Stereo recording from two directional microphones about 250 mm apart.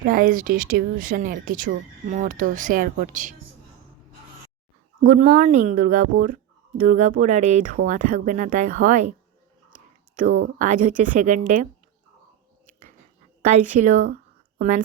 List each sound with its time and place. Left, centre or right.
0.0 s speech: right
5.0 s speech: right
10.2 s speech: right
13.4 s speech: right